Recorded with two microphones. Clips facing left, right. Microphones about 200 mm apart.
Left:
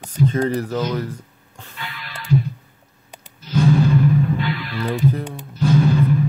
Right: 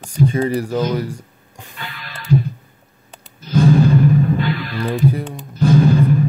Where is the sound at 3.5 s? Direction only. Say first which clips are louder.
Right 3 dB; 50° right (ahead or behind).